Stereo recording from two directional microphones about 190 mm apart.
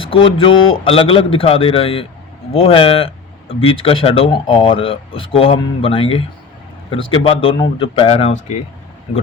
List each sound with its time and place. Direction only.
0.0 s speech: 30° left (ahead or behind)